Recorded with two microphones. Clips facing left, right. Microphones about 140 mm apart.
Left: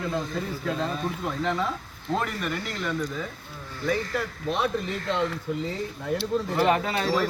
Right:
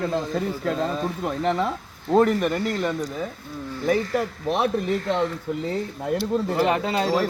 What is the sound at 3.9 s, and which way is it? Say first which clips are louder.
Speech: right 5 dB; 50° right (ahead or behind).